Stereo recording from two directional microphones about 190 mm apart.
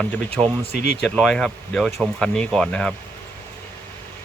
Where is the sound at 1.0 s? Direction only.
Centre (ahead or behind).